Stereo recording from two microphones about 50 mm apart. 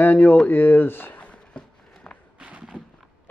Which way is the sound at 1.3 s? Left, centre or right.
Centre.